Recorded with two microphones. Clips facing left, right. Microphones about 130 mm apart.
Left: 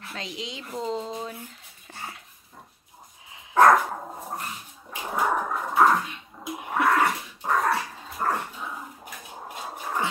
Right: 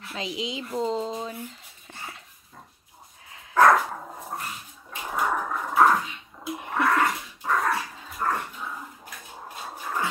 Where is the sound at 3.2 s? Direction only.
10° left (ahead or behind).